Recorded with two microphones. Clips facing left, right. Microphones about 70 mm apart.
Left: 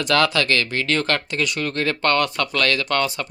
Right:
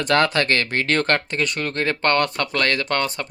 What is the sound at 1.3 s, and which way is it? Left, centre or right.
Speech, right.